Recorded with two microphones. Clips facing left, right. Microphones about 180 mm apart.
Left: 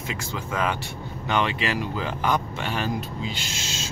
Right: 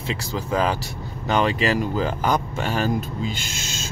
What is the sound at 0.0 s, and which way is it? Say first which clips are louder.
Speech: right 4 dB; 35° right (ahead or behind).